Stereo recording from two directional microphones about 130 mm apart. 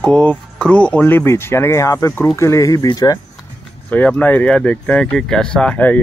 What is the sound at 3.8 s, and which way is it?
Speech, 10° left (ahead or behind).